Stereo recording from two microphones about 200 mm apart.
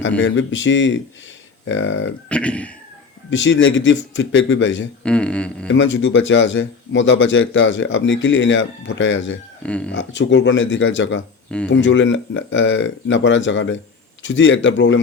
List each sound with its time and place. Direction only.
0.2 s speech: 75° left (ahead or behind)
2.3 s speech: 5° left (ahead or behind)
3.2 s speech: 70° left (ahead or behind)
5.0 s speech: 5° left (ahead or behind)
5.7 s speech: 70° left (ahead or behind)
9.6 s speech: 5° left (ahead or behind)
9.9 s speech: 65° left (ahead or behind)